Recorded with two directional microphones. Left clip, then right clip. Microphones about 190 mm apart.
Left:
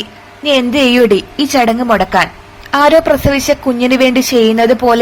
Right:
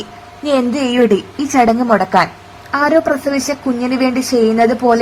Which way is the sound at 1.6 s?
10° left (ahead or behind).